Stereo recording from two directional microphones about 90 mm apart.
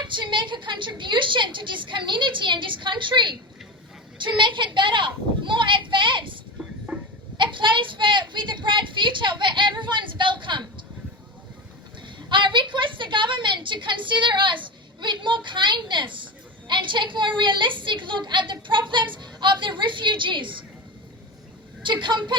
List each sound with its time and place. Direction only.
0.0 s a woman's voice: 60° right (ahead or behind)
12.0 s a woman's voice: 65° right (ahead or behind)
22.0 s a woman's voice: 60° right (ahead or behind)